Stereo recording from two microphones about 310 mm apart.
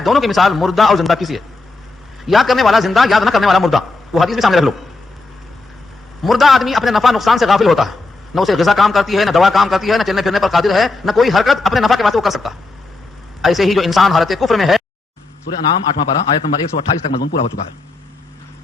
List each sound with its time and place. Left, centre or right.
0.0 s a man's voice: centre
6.2 s a man's voice: centre
16.0 s a man's voice: centre